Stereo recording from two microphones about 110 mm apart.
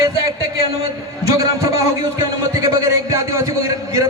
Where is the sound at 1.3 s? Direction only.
30° right (ahead or behind).